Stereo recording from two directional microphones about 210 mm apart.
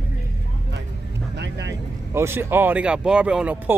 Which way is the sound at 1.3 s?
55° right (ahead or behind).